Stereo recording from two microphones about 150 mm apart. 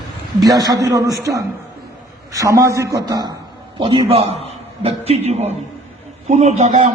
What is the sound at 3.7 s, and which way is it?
A man's voice, 35° right (ahead or behind).